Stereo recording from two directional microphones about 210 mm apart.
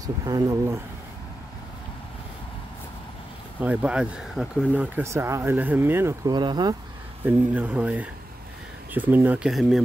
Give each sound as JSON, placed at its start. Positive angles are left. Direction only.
{"t": 0.0, "sound": "speech", "side_deg": -15}
{"t": 3.6, "sound": "speech", "side_deg": -5}
{"t": 7.2, "sound": "speech", "side_deg": -5}